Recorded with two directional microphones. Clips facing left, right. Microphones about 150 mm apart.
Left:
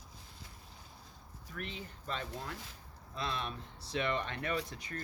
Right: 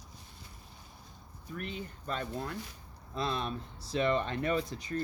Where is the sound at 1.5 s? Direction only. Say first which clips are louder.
Right 4 dB; 45° right (ahead or behind).